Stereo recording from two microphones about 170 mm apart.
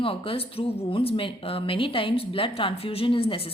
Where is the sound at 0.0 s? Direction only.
30° left (ahead or behind).